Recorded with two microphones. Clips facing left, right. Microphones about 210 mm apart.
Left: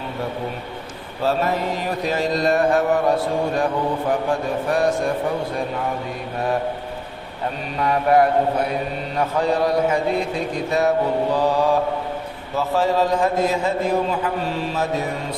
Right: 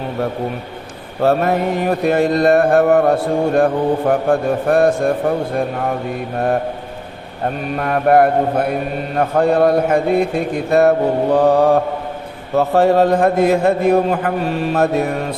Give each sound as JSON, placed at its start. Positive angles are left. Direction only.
{"t": 1.2, "sound": "mantra", "side_deg": -60}
{"t": 7.4, "sound": "mantra", "side_deg": -55}